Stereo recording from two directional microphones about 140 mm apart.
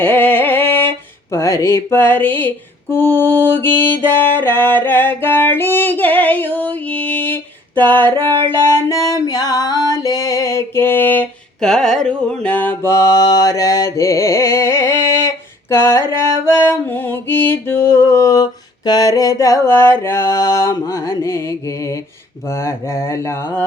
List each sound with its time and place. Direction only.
0.0 s music: 10° left (ahead or behind)
8.4 s a sound: 20° left (ahead or behind)
11.7 s mantra: centre (ahead or behind); by 15.3 s 15° left (ahead or behind)
15.7 s a sound: 20° left (ahead or behind)
16.5 s music: 15° left (ahead or behind)
18.9 s mantra: 25° left (ahead or behind)